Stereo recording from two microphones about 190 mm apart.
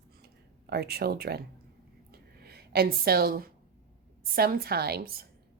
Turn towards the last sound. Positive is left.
turn(degrees=-55)  # may be behind; listen again after turning